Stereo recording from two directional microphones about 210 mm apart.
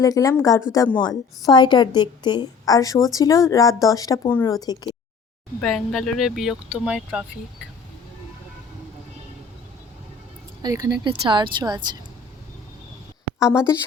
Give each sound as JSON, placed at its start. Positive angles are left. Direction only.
{"t": 0.0, "sound": "a woman's voice", "side_deg": 15}
{"t": 5.5, "sound": "speech", "side_deg": 0}
{"t": 10.6, "sound": "speech", "side_deg": -15}